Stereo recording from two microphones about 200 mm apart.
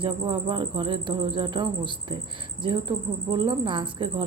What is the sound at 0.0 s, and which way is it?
Speech, 25° right (ahead or behind).